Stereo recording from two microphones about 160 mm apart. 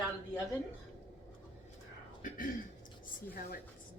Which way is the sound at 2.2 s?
55° left (ahead or behind).